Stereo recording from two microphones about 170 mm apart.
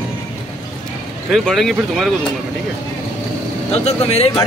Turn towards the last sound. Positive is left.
turn(degrees=40)  # may be behind; listen again after turning